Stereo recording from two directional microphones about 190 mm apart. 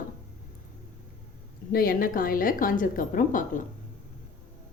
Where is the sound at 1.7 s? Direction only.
50° left (ahead or behind).